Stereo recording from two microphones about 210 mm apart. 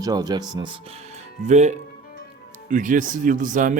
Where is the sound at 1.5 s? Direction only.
35° right (ahead or behind).